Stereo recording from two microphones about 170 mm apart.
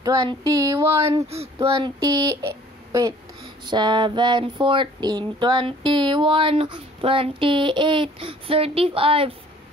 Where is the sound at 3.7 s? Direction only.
25° right (ahead or behind).